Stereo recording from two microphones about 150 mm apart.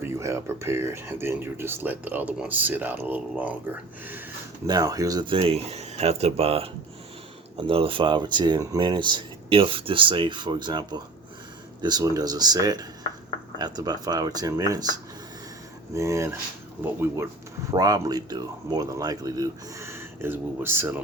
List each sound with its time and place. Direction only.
0.0 s speech: 20° right (ahead or behind)
4.6 s speech: 25° right (ahead or behind)
17.7 s speech: 25° right (ahead or behind)